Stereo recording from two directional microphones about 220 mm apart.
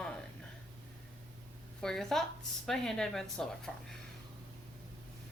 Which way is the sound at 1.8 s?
Centre (ahead or behind).